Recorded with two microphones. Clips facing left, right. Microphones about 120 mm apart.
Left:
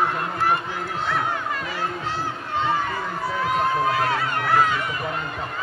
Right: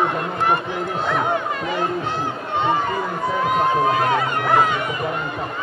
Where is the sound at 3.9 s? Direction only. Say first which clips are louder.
Right 4 dB; 20° right (ahead or behind).